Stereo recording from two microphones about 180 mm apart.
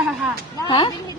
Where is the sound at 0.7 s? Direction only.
25° left (ahead or behind).